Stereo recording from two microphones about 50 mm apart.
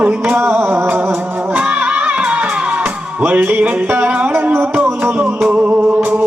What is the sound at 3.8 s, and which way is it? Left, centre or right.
Music, right.